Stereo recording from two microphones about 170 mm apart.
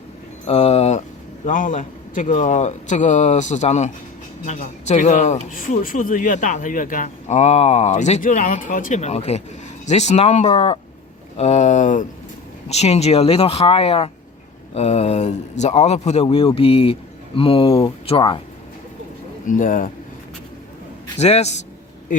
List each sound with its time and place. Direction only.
0.4 s speech: 35° left (ahead or behind)
1.5 s speech: 50° left (ahead or behind); by 18.4 s 30° left (ahead or behind)
19.5 s speech: 50° left (ahead or behind)
21.2 s speech: 40° left (ahead or behind)